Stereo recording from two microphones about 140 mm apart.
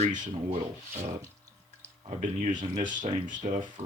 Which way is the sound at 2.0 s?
55° right (ahead or behind).